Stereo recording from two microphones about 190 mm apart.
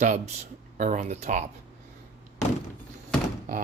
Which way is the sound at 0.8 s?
40° right (ahead or behind).